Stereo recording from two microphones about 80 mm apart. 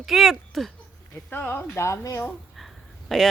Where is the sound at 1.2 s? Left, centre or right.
Left.